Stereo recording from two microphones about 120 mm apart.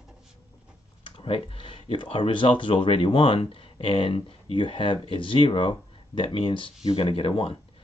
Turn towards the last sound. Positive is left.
turn(degrees=45)  # may be behind; listen again after turning